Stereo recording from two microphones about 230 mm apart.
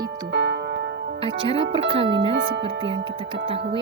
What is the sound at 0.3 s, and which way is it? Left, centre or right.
Music, right.